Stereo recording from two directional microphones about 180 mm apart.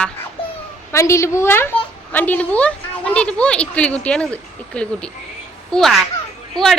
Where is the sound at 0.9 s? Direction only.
15° left (ahead or behind).